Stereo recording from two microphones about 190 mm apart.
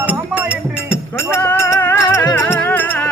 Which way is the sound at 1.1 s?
10° left (ahead or behind).